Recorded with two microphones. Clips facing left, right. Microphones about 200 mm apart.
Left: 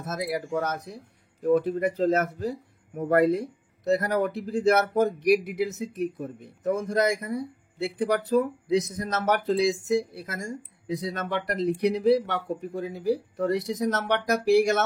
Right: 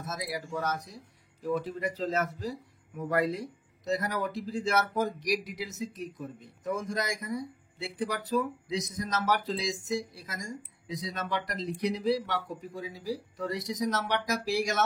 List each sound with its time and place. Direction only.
0.0 s speech: 60° left (ahead or behind)